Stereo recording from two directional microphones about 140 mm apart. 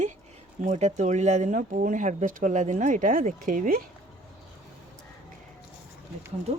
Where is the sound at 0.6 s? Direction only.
55° right (ahead or behind); by 3.8 s 80° right.